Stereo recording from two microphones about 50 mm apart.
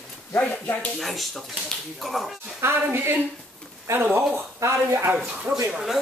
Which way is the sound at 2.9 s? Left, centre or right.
Right.